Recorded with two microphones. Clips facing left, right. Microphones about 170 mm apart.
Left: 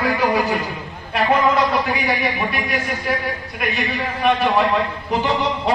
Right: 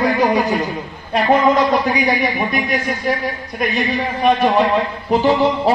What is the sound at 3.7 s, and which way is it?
Speech, 40° right (ahead or behind).